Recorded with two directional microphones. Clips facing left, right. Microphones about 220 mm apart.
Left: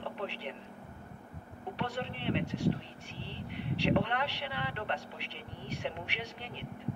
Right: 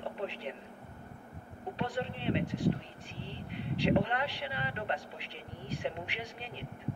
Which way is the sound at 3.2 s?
70° left (ahead or behind).